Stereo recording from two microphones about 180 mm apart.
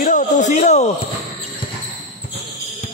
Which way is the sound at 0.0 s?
45° left (ahead or behind).